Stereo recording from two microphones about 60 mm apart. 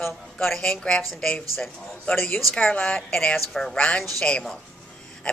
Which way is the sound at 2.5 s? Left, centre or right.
Centre.